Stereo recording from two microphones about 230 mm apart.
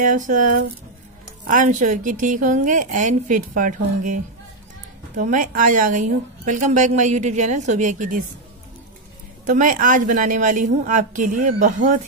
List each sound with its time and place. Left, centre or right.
0.0 s a woman's voice: right
9.5 s a woman's voice: right